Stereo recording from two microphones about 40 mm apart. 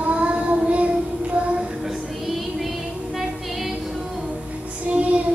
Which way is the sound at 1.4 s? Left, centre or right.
Right.